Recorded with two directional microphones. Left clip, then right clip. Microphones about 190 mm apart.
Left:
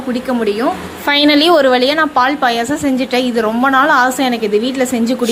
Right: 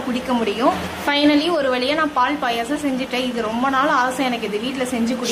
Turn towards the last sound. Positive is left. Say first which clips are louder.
# left 7 dB
turn(degrees=35)  # may be behind; listen again after turning